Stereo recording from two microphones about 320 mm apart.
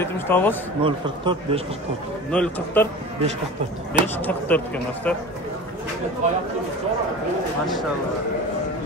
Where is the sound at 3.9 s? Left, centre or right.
Centre.